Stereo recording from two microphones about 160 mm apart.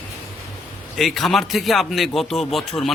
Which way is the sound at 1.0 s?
Centre (ahead or behind).